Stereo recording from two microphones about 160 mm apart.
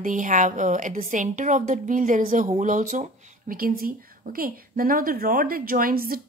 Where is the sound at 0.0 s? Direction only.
55° right (ahead or behind).